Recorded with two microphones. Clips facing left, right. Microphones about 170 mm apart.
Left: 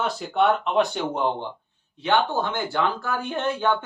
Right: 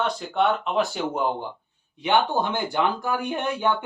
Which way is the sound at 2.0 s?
15° right (ahead or behind).